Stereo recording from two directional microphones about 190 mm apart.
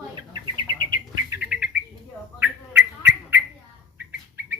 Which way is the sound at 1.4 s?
5° right (ahead or behind).